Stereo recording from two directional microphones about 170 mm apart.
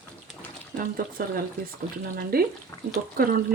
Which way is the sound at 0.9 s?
55° right (ahead or behind).